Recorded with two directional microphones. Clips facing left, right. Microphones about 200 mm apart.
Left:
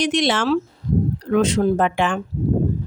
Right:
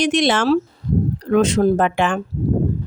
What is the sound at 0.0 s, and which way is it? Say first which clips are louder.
A woman's voice: right 2 dB; 50° right (ahead or behind).